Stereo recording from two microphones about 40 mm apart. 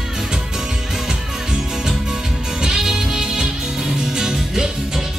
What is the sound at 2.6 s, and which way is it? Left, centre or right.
Music, centre.